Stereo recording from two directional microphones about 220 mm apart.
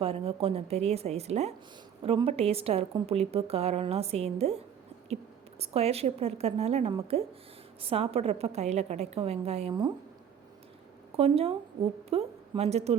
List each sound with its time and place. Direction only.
0.0 s a woman's voice: 25° right (ahead or behind)
11.2 s a woman's voice: 25° right (ahead or behind)